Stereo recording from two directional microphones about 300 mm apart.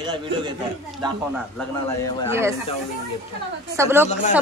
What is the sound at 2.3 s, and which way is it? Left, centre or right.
Speech, centre.